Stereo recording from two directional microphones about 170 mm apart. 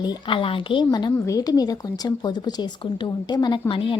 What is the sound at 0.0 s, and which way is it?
A woman's voice, 30° left (ahead or behind).